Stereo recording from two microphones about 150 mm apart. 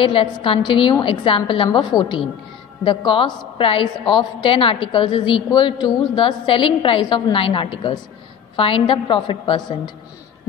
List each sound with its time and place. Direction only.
0.0 s a woman's voice: 35° left (ahead or behind)